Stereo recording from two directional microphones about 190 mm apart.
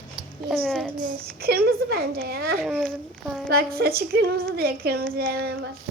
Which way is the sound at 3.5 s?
50° right (ahead or behind).